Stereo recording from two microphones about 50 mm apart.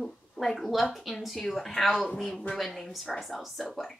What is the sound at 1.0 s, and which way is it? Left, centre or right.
A woman's voice, centre.